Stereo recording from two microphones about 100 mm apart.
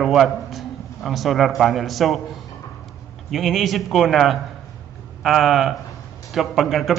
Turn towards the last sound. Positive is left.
turn(degrees=0)  # may be behind; listen again after turning